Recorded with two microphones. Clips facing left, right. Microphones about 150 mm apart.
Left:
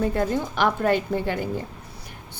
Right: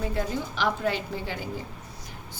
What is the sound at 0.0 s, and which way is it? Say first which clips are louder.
A woman's voice: left 6 dB; 55° left (ahead or behind).